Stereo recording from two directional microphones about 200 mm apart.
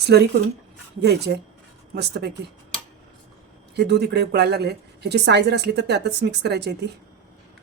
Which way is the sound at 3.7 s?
55° right (ahead or behind).